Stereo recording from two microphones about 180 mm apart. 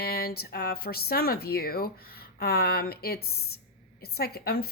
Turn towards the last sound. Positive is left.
turn(degrees=60)  # may be behind; listen again after turning